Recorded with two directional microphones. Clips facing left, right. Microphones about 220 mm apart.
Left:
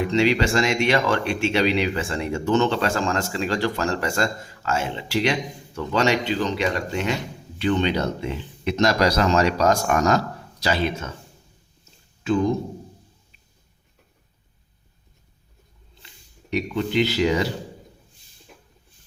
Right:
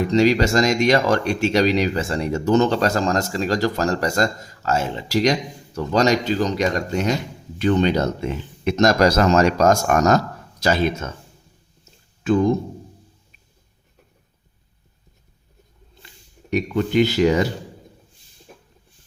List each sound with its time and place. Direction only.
0.0 s speech: 40° right (ahead or behind)
16.5 s speech: 50° right (ahead or behind)